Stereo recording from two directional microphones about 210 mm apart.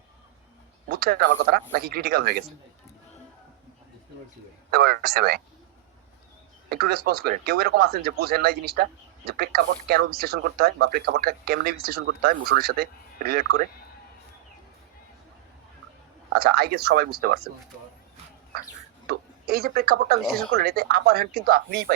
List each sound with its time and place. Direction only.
0.9 s speech: 50° right (ahead or behind)
4.7 s speech: 45° right (ahead or behind)
6.7 s speech: 50° right (ahead or behind)
16.3 s speech: 45° right (ahead or behind)
19.0 s speech: 45° right (ahead or behind)